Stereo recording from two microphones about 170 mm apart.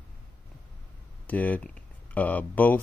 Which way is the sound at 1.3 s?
10° left (ahead or behind).